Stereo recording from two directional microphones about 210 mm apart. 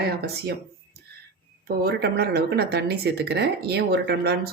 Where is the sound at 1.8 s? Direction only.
50° right (ahead or behind).